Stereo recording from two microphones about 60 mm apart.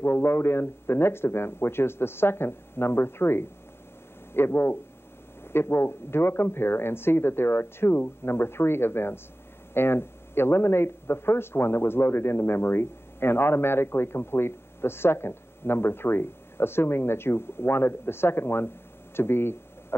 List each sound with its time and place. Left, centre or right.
0.0 s speech: left